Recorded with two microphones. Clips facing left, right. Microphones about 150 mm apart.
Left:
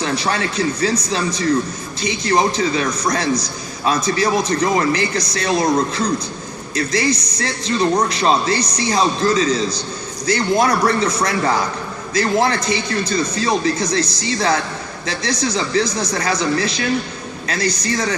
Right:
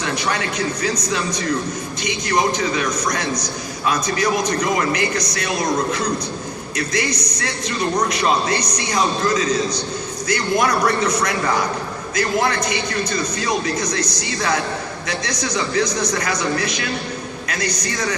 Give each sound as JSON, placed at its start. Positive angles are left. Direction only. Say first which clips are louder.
{"t": 0.0, "sound": "a man's voice", "louder": "left 2 dB", "side_deg": 30}